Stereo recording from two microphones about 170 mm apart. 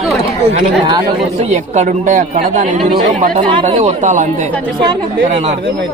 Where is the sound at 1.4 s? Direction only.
45° right (ahead or behind).